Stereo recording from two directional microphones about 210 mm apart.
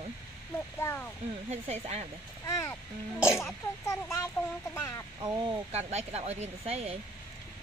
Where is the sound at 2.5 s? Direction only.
15° left (ahead or behind).